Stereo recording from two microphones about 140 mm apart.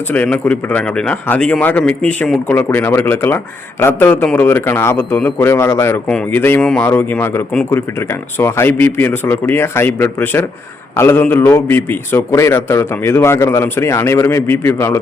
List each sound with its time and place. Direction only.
0.1 s speech: 10° left (ahead or behind)